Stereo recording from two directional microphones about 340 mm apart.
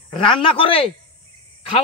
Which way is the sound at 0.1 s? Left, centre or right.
Centre.